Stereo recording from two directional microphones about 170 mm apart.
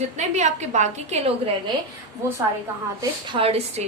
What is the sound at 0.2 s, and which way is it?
A woman's voice, 45° right (ahead or behind).